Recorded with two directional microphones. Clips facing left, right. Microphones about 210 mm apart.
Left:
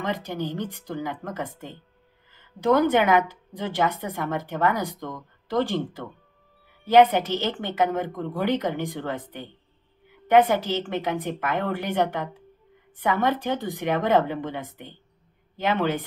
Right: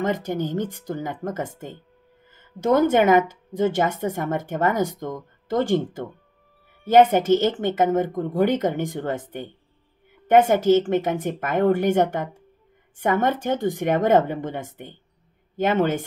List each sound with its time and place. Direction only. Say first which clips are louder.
0.0 s a woman's voice: right 5 dB; 50° right (ahead or behind)
2.9 s a woman's voice: right 3 dB; 45° right (ahead or behind)